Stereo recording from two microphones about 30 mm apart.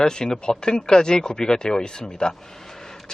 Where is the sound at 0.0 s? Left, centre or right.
Left.